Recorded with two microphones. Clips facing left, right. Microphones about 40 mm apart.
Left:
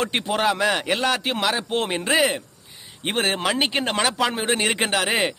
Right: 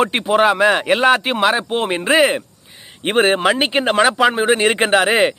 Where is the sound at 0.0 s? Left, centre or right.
Centre.